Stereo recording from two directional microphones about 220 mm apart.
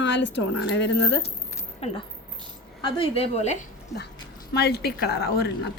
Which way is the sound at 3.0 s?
30° left (ahead or behind).